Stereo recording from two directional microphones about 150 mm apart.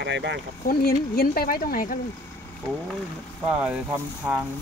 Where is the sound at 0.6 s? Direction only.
90° left; by 1.9 s 70° left (ahead or behind).